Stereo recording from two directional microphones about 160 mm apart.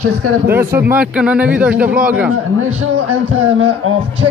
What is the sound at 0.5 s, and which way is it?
A man's voice, 15° right (ahead or behind).